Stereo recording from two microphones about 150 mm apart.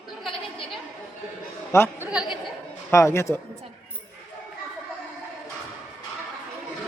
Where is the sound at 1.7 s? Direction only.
15° left (ahead or behind).